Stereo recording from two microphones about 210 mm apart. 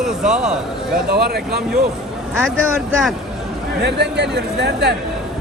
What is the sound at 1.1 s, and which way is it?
Speech, 50° right (ahead or behind).